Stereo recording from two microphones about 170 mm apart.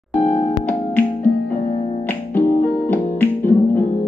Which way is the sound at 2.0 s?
10° left (ahead or behind).